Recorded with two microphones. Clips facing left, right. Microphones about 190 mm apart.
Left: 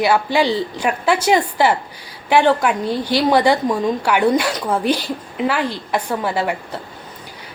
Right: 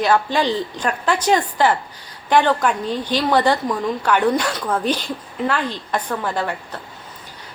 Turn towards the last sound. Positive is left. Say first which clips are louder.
# left 3 dB
turn(degrees=10)  # may be behind; listen again after turning